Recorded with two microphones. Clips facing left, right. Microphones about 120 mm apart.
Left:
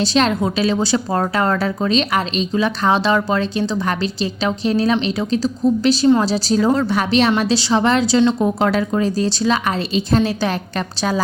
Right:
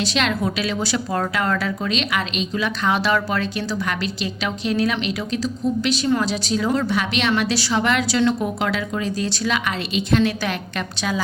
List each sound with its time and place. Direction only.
0.0 s a woman's voice: 35° left (ahead or behind)
8.6 s a woman's voice: 40° left (ahead or behind)